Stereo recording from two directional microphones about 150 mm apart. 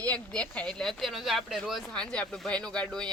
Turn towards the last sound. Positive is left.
turn(degrees=5)  # may be behind; listen again after turning